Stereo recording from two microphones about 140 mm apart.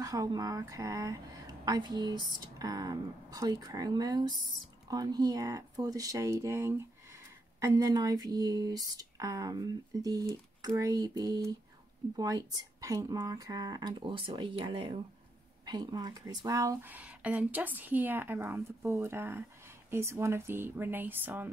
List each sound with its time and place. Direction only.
0.0 s speech: 25° right (ahead or behind)
16.9 s a woman's voice: 10° right (ahead or behind)